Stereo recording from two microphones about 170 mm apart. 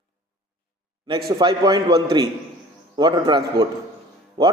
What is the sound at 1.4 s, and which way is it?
A man's voice, 25° right (ahead or behind).